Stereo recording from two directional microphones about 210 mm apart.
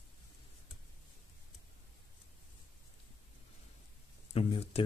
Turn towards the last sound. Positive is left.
turn(degrees=25)  # may be behind; listen again after turning